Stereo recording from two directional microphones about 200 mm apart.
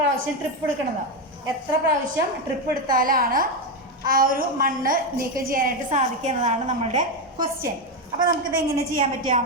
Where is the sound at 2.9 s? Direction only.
45° right (ahead or behind); by 7.7 s 20° right (ahead or behind).